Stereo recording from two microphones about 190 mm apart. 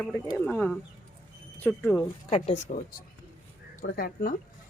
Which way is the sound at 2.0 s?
30° left (ahead or behind).